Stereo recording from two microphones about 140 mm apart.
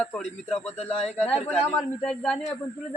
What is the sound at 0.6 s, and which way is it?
Speech, 50° left (ahead or behind).